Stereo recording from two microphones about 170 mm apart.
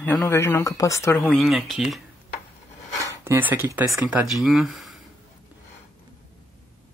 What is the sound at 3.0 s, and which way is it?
Speech, 15° right (ahead or behind).